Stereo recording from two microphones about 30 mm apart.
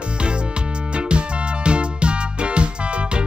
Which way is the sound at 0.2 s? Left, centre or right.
Right.